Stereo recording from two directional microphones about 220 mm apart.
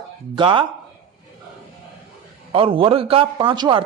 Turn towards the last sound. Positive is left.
turn(degrees=-20)  # may be behind; listen again after turning